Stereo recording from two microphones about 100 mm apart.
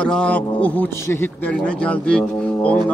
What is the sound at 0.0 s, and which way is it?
A man's voice, 10° left (ahead or behind).